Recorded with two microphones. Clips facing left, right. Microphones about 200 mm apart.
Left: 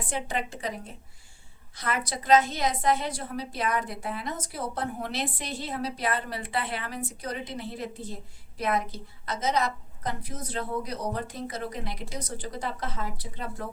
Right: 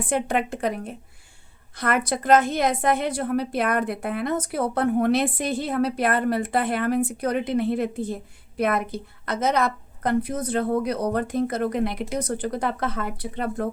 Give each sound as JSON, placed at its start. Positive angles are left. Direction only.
{"t": 0.0, "sound": "a woman's voice", "side_deg": -55}